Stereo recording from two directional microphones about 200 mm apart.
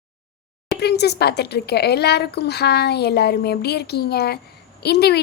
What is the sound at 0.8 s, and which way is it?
A woman's voice, 55° left (ahead or behind).